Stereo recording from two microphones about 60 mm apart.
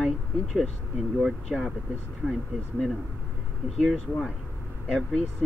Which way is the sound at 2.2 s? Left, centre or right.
Centre.